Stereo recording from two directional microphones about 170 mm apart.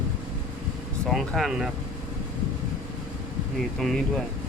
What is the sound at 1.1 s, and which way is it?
Speech, centre (ahead or behind).